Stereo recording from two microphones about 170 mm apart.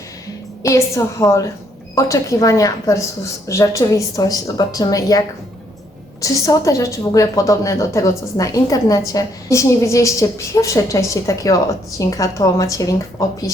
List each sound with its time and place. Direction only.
0.6 s a woman's voice: 20° left (ahead or behind)
6.2 s a woman's voice: 20° left (ahead or behind)